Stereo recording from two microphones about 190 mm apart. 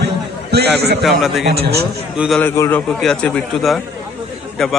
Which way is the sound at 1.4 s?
55° right (ahead or behind).